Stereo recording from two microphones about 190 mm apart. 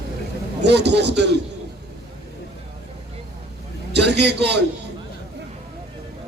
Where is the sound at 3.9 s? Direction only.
60° right (ahead or behind).